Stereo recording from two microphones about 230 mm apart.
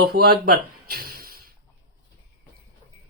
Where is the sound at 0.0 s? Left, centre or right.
Right.